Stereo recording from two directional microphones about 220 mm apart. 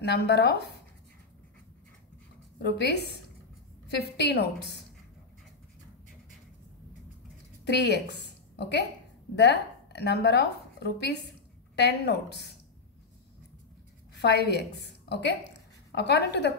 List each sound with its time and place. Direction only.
0.0 s a woman's voice: 50° left (ahead or behind)
2.6 s a woman's voice: 50° left (ahead or behind)
7.6 s a woman's voice: 50° left (ahead or behind)
14.1 s a woman's voice: 50° left (ahead or behind)